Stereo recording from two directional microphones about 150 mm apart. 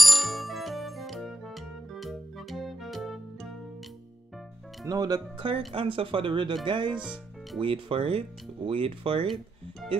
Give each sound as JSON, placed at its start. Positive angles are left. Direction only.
{"t": 0.0, "sound": "music", "side_deg": 0}
{"t": 4.8, "sound": "speech", "side_deg": -25}